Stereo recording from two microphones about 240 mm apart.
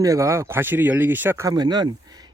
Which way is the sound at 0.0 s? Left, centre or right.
Centre.